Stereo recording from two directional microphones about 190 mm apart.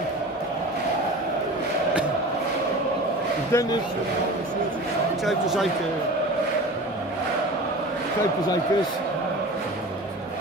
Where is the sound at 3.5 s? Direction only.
15° left (ahead or behind).